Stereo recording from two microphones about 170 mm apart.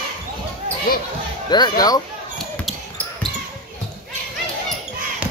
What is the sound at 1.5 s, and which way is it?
Speech, 25° left (ahead or behind).